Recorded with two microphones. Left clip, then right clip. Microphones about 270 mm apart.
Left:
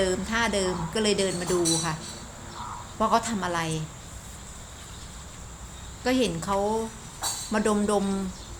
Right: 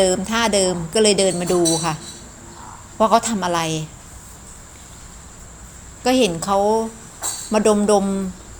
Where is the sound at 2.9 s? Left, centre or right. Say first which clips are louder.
Right 8 dB; centre.